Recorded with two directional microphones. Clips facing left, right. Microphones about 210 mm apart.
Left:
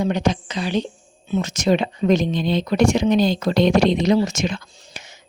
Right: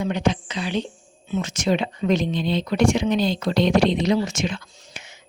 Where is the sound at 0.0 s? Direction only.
40° left (ahead or behind).